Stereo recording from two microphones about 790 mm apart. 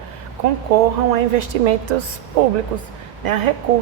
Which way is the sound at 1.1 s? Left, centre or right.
Right.